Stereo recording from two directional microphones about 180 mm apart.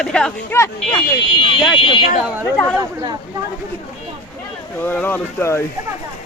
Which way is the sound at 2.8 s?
20° right (ahead or behind).